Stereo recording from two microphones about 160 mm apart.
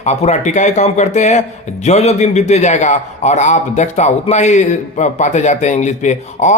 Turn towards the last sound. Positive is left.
turn(degrees=50)  # may be behind; listen again after turning